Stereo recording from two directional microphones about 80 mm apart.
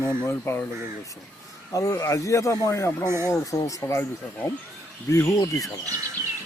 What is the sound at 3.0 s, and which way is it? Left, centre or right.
Speech, right.